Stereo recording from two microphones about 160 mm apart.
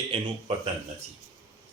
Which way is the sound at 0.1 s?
35° right (ahead or behind).